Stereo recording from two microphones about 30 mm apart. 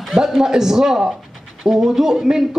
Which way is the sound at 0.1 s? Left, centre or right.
Centre.